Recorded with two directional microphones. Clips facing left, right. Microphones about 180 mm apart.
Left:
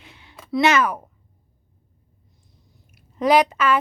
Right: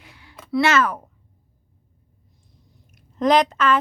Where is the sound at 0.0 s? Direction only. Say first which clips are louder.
Even; 25° left (ahead or behind).